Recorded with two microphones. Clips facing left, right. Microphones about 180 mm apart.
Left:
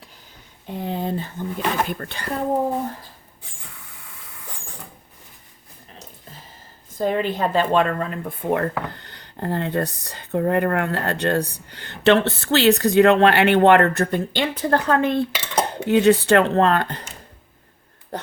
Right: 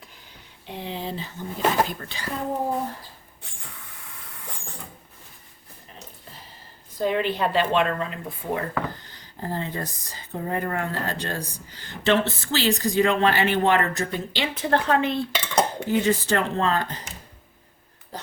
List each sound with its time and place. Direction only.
0.7 s speech: 45° left (ahead or behind)
7.0 s speech: 45° left (ahead or behind)
15.3 s dishes: 5° left (ahead or behind)
15.9 s speech: 70° left (ahead or behind)
18.1 s speech: 60° left (ahead or behind)